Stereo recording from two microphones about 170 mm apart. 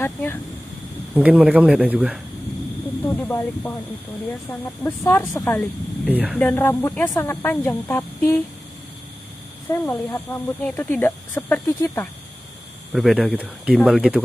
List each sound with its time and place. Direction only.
0.0 s speech: 15° left (ahead or behind)
1.1 s speech: 10° right (ahead or behind)
3.1 s speech: 10° left (ahead or behind)
6.0 s speech: 10° right (ahead or behind)
6.3 s speech: 10° left (ahead or behind)
9.7 s speech: 10° left (ahead or behind)
12.9 s speech: centre (ahead or behind)